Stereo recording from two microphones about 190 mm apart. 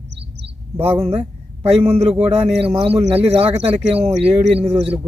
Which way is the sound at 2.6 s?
30° right (ahead or behind).